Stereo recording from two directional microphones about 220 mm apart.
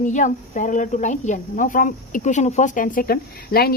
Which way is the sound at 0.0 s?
35° left (ahead or behind).